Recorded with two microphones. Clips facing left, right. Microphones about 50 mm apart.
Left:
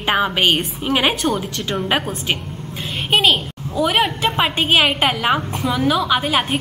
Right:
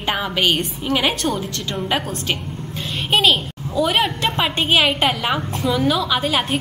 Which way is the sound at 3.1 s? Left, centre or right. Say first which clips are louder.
Left 1 dB; centre.